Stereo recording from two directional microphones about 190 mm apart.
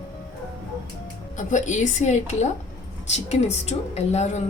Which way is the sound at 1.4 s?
40° left (ahead or behind).